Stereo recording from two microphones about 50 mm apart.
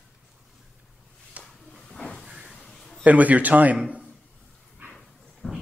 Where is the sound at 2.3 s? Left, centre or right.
Centre.